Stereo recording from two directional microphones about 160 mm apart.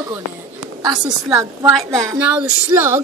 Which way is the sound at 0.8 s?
25° right (ahead or behind).